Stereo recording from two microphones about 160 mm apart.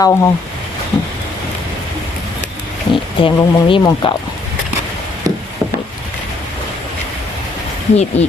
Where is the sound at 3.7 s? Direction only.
30° left (ahead or behind).